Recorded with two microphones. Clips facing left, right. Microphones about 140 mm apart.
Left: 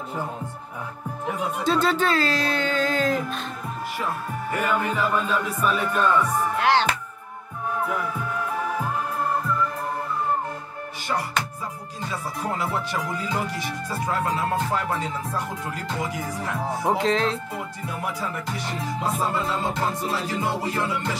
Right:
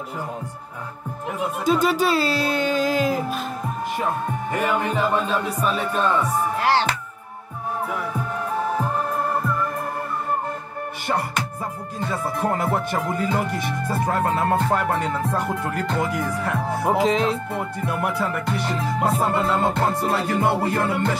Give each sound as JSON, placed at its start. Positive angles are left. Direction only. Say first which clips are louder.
{"t": 1.7, "sound": "speech", "louder": "right 3 dB", "side_deg": -10}
{"t": 4.5, "sound": "music", "louder": "right 1 dB", "side_deg": -40}
{"t": 6.6, "sound": "speech", "louder": "even", "side_deg": -5}
{"t": 12.0, "sound": "speech", "louder": "right 6 dB", "side_deg": -55}
{"t": 16.8, "sound": "speech", "louder": "right 3 dB", "side_deg": -5}
{"t": 17.6, "sound": "speech", "louder": "right 6 dB", "side_deg": -60}